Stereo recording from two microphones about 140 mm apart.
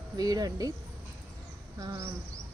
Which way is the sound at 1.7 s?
20° right (ahead or behind).